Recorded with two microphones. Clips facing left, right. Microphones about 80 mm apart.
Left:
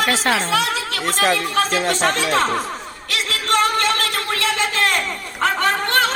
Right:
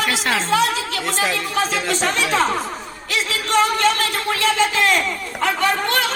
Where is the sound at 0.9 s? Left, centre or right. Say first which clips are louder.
Left 3 dB; left.